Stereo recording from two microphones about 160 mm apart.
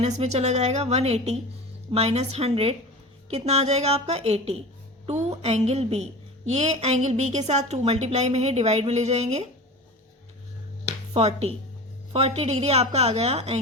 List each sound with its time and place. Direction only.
0.0 s a woman's voice: 45° right (ahead or behind)
11.1 s a woman's voice: 40° right (ahead or behind)